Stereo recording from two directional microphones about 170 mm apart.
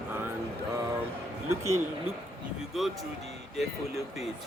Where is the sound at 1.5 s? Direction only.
15° right (ahead or behind).